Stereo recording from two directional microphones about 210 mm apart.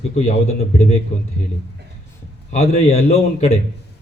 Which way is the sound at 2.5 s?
30° left (ahead or behind).